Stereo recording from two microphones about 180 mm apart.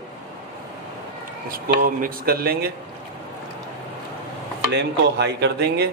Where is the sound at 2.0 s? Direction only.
55° right (ahead or behind).